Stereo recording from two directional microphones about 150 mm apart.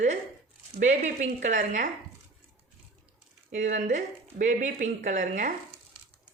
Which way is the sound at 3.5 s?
55° right (ahead or behind).